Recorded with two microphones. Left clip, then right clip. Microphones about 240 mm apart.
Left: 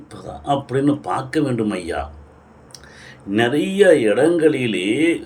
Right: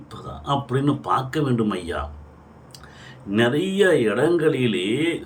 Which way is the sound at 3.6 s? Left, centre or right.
Right.